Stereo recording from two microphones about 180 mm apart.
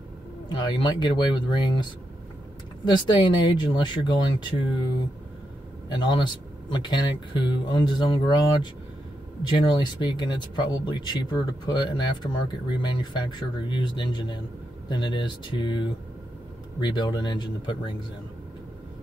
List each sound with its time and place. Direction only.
0.5 s speech: 25° left (ahead or behind)
5.9 s a man's voice: 25° left (ahead or behind)
9.7 s speech: 25° left (ahead or behind)